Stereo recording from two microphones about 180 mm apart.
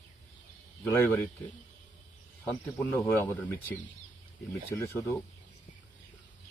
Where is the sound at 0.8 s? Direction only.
15° left (ahead or behind).